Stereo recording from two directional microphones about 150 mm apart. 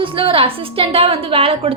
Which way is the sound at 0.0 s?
35° right (ahead or behind).